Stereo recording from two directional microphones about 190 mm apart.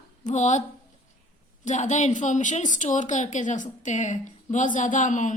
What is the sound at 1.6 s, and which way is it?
Speech, 40° left (ahead or behind).